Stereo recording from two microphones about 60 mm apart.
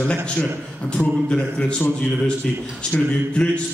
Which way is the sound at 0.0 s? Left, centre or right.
Centre.